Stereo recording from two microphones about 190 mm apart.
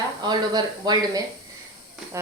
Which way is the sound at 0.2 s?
20° right (ahead or behind).